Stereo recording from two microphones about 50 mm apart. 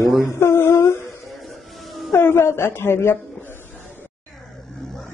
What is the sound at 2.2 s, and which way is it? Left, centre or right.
A woman's voice, left.